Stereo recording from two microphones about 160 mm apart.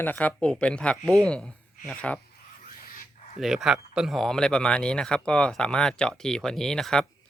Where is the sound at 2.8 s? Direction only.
60° left (ahead or behind).